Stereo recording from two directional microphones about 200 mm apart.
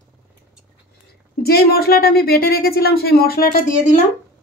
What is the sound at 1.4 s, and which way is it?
Speech, 50° left (ahead or behind).